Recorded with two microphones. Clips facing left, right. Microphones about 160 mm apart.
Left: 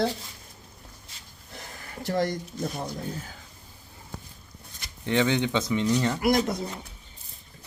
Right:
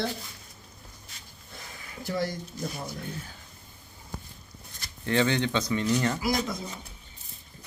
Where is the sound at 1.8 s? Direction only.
55° left (ahead or behind).